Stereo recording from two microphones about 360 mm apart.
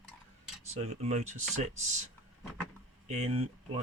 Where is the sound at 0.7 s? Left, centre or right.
Centre.